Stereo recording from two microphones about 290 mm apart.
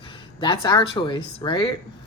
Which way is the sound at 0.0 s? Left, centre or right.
Centre.